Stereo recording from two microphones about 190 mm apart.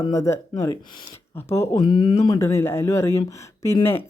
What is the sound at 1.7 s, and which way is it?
Speech, 25° left (ahead or behind).